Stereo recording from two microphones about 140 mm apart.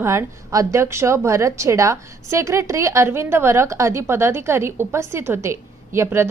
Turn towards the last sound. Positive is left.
turn(degrees=-15)  # may be behind; listen again after turning